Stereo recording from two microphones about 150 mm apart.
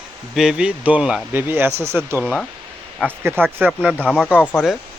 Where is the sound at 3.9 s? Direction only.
5° left (ahead or behind).